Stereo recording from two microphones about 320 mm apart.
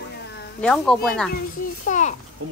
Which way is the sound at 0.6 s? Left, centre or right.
Centre.